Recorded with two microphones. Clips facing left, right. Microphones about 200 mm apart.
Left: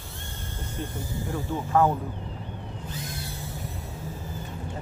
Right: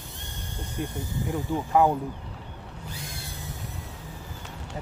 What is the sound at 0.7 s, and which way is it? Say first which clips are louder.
Speech: right 2 dB; 15° right (ahead or behind).